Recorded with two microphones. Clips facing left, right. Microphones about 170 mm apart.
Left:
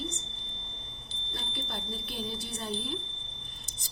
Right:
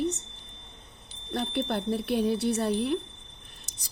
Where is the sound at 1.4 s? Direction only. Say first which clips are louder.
Right 12 dB; 65° right (ahead or behind).